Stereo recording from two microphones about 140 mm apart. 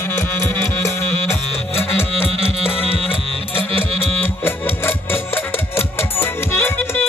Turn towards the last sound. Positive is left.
turn(degrees=15)  # may be behind; listen again after turning